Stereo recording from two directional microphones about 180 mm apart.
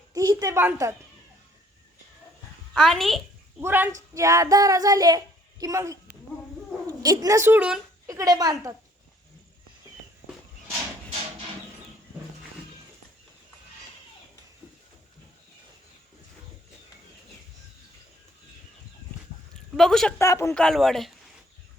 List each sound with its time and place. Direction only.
0.1 s a woman's voice: 20° right (ahead or behind)
2.7 s speech: centre (ahead or behind)
3.6 s a woman's voice: 10° right (ahead or behind)
8.0 s a child's voice: 20° right (ahead or behind)
19.7 s speech: centre (ahead or behind)
20.1 s speech: 15° left (ahead or behind)
20.6 s speech: centre (ahead or behind)